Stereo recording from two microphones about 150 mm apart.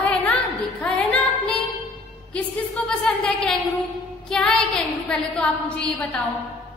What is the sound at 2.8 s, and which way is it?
A woman's voice, 10° left (ahead or behind).